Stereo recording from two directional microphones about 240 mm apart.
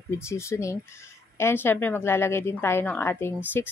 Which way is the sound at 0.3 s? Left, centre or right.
Centre.